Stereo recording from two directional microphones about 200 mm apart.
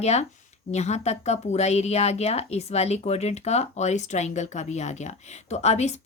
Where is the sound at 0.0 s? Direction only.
35° left (ahead or behind).